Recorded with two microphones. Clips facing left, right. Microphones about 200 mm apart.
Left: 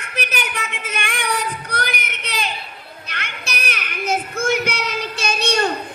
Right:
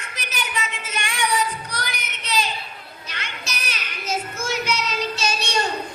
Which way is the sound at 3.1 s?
60° left (ahead or behind).